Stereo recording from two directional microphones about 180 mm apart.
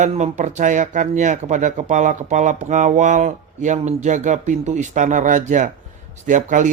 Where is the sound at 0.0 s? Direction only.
40° right (ahead or behind).